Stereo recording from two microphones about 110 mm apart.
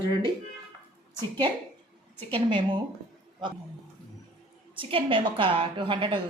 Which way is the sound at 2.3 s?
50° right (ahead or behind).